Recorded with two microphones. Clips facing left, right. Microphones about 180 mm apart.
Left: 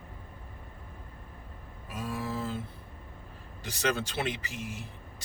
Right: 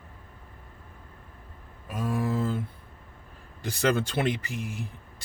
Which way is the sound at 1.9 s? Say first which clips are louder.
Right 7 dB; 50° right (ahead or behind).